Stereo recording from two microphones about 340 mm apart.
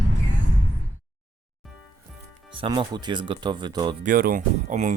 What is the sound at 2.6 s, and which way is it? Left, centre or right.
Speech, centre.